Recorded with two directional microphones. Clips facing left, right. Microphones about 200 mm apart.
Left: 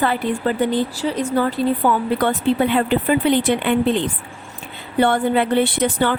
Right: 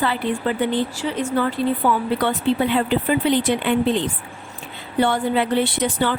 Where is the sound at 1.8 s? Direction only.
50° left (ahead or behind).